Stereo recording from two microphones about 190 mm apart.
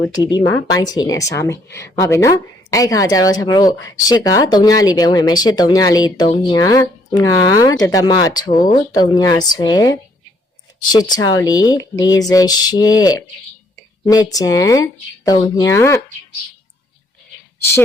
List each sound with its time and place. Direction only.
0.0 s speech: 20° left (ahead or behind)
17.6 s a woman's voice: 15° left (ahead or behind)